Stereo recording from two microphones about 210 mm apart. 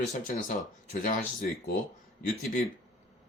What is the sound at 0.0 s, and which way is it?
Speech, 35° left (ahead or behind).